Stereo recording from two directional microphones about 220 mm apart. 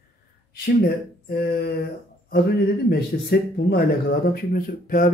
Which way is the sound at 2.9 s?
45° left (ahead or behind).